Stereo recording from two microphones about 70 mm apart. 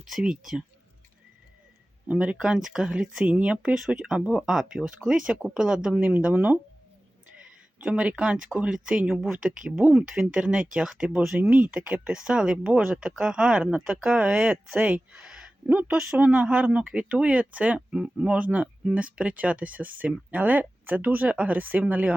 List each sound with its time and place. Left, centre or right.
0.0 s speech: centre
2.0 s speech: centre
6.3 s speech: right
7.3 s a sound: centre
8.5 s speech: centre